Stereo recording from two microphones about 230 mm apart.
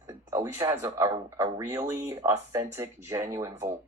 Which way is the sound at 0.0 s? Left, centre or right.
Centre.